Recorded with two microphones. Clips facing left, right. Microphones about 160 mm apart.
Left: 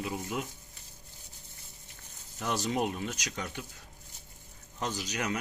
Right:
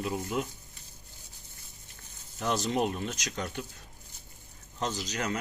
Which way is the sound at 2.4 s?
10° left (ahead or behind).